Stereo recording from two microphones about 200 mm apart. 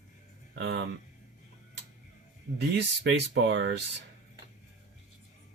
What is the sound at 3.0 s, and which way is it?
Speech, 60° right (ahead or behind).